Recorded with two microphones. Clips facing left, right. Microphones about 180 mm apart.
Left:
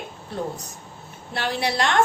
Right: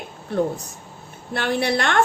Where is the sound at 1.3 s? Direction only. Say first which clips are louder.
Right 4 dB; 55° right (ahead or behind).